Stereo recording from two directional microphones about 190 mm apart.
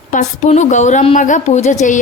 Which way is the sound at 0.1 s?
40° left (ahead or behind).